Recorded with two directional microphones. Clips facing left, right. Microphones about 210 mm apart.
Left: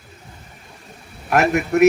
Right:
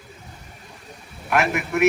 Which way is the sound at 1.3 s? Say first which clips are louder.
Left 5 dB; 40° left (ahead or behind).